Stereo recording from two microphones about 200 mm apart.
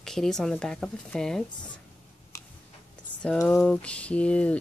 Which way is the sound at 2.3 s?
15° left (ahead or behind).